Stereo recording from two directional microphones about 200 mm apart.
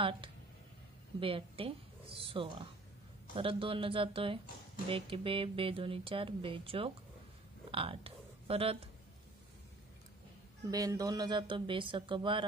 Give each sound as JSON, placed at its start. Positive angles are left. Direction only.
{"t": 1.2, "sound": "speech", "side_deg": -25}
{"t": 10.7, "sound": "speech", "side_deg": -20}